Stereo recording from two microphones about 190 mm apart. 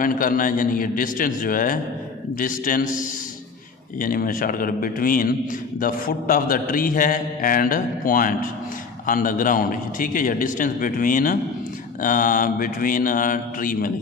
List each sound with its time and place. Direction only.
0.0 s a man's voice: 45° left (ahead or behind)
4.0 s a man's voice: 45° left (ahead or behind)